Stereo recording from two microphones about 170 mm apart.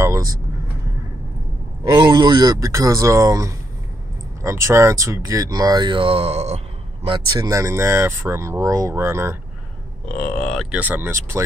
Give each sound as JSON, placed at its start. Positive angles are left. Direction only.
{"t": 0.0, "sound": "vehicle", "side_deg": -20}
{"t": 2.0, "sound": "speech", "side_deg": -25}
{"t": 7.3, "sound": "speech", "side_deg": -20}
{"t": 10.0, "sound": "speech", "side_deg": 10}